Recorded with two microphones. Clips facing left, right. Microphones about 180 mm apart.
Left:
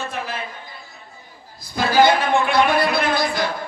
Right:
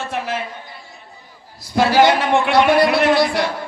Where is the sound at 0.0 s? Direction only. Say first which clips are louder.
Right 4 dB; 75° right (ahead or behind).